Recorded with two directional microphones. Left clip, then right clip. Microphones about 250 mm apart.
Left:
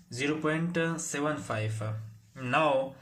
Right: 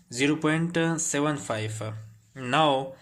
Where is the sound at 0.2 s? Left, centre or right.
Right.